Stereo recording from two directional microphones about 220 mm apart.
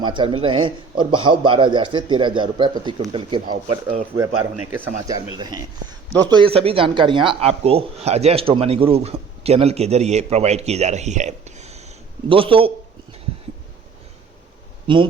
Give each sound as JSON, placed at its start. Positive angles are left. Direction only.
{"t": 0.0, "sound": "speech", "side_deg": -20}
{"t": 4.2, "sound": "a man's voice", "side_deg": -10}